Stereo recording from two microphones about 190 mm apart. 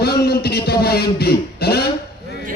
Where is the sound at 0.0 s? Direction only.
55° left (ahead or behind).